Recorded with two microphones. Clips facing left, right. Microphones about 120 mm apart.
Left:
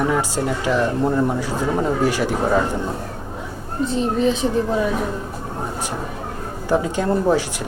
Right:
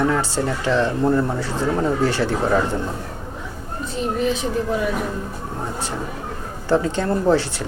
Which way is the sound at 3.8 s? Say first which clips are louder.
Left 4 dB; 30° left (ahead or behind).